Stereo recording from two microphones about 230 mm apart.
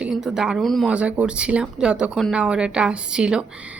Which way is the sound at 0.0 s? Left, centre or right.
Centre.